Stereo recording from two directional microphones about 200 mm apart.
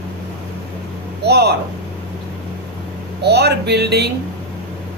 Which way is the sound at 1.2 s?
55° right (ahead or behind).